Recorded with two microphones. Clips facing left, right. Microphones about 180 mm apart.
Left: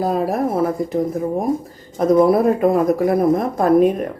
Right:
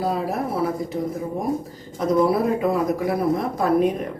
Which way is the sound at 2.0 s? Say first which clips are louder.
Left 6 dB; 50° left (ahead or behind).